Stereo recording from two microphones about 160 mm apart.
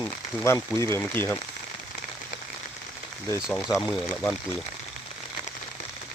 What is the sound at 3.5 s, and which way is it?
Speech, 15° left (ahead or behind).